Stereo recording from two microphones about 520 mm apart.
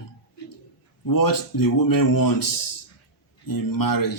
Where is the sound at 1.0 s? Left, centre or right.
Left.